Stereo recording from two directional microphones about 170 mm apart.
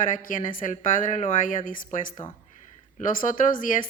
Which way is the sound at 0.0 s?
50° left (ahead or behind).